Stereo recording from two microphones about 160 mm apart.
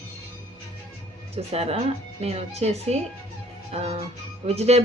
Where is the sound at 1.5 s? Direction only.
40° right (ahead or behind).